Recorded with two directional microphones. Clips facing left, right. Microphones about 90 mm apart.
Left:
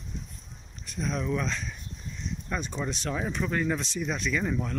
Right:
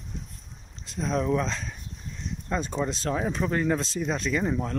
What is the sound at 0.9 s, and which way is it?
Speech, 35° right (ahead or behind).